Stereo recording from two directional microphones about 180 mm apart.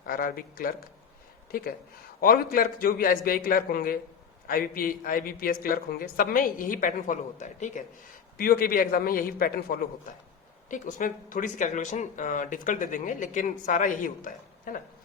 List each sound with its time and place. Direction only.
0.0 s speech: 55° left (ahead or behind)
2.2 s speech: 55° left (ahead or behind)
8.4 s speech: 55° left (ahead or behind)